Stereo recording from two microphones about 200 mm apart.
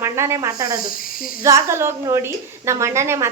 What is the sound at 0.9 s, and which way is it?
Speech, 45° left (ahead or behind).